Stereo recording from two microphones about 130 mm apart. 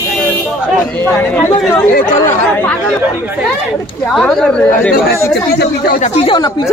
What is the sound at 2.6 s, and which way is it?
Speech, 10° left (ahead or behind).